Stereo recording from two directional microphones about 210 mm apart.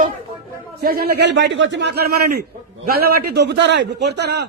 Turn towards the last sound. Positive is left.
turn(degrees=-55)  # may be behind; listen again after turning